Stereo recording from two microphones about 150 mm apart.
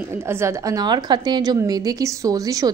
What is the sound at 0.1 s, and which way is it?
A woman's voice, 15° right (ahead or behind).